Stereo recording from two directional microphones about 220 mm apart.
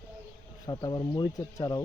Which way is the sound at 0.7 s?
15° left (ahead or behind).